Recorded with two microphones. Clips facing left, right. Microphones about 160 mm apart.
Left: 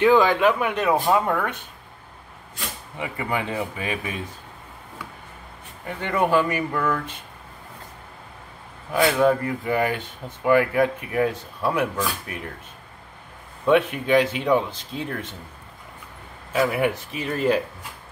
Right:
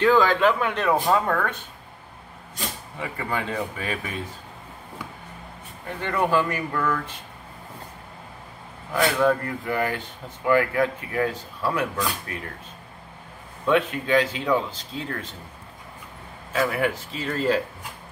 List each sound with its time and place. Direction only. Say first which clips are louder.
0.0 s speech: left 2 dB; 15° left (ahead or behind)
3.0 s speech: left 2 dB; 15° left (ahead or behind)
5.9 s speech: left 2 dB; 20° left (ahead or behind)
8.9 s speech: left 2 dB; 20° left (ahead or behind)
13.7 s speech: left 3 dB; 20° left (ahead or behind)
16.5 s speech: left 2 dB; 15° left (ahead or behind)